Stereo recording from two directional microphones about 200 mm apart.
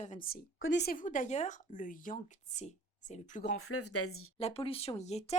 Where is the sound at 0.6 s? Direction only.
60° left (ahead or behind); by 3.4 s 35° left (ahead or behind).